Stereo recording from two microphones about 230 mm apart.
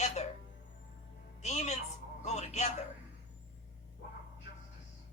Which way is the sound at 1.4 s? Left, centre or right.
Left.